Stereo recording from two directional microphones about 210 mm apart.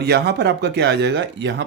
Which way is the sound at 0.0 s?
50° right (ahead or behind).